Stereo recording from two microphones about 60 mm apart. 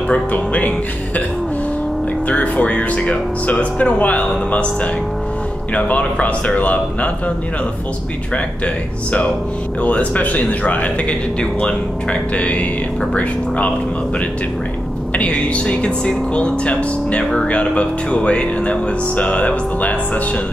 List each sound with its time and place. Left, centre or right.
0.1 s speech: left
2.2 s speech: left
5.8 s speech: left
9.8 s speech: left
15.1 s speech: left